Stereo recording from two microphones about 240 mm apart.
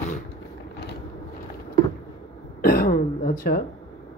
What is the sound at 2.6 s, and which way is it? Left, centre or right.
Throat clearing, left.